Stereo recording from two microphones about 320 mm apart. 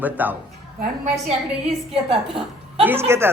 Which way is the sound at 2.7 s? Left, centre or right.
Centre.